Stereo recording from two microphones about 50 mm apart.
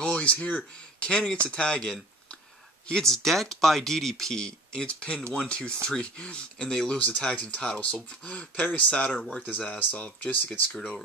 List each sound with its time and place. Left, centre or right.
0.0 s speech: centre